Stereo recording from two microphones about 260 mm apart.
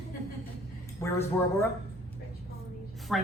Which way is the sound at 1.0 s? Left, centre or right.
Centre.